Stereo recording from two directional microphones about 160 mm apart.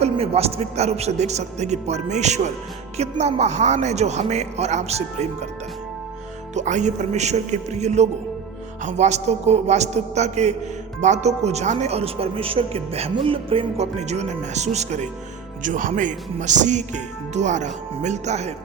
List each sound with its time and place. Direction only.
0.0 s a man's voice: 40° right (ahead or behind)
6.5 s a man's voice: 50° right (ahead or behind)